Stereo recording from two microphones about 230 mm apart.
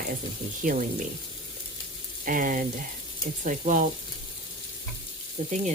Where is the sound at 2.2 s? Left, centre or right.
Right.